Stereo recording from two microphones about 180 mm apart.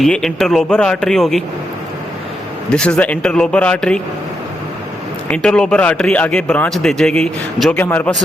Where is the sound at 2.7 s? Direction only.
5° left (ahead or behind).